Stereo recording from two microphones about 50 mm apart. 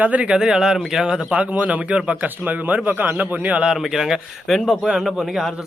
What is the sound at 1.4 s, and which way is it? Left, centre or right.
Speech, right.